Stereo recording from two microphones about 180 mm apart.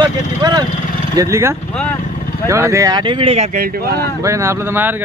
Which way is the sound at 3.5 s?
55° right (ahead or behind).